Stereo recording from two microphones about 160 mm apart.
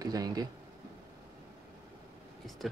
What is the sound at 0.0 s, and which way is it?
Speech, 25° right (ahead or behind).